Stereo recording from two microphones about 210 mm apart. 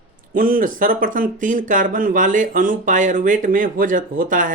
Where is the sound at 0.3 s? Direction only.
40° right (ahead or behind).